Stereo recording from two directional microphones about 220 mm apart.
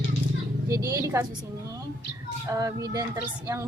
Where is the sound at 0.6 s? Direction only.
15° right (ahead or behind).